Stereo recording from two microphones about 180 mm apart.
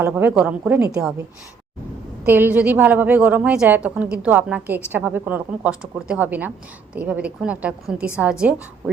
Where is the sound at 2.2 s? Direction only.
10° right (ahead or behind).